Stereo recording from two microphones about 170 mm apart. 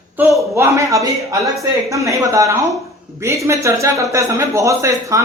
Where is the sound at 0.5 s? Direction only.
15° right (ahead or behind).